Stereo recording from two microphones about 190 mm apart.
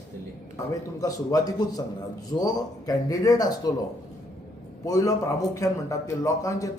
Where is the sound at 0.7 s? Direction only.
20° left (ahead or behind).